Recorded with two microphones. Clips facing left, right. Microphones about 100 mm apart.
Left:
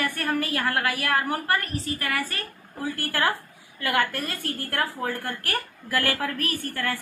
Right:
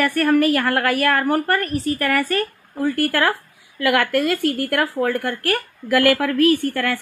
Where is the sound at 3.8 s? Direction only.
90° right.